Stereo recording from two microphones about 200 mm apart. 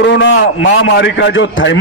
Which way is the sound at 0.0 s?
65° left (ahead or behind).